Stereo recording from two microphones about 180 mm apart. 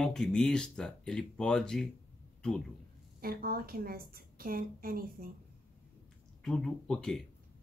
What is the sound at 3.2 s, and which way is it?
A woman's voice, 55° right (ahead or behind).